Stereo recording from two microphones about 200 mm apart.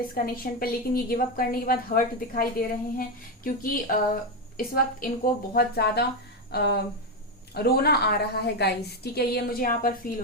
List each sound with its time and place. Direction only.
0.0 s a woman's voice: 45° left (ahead or behind)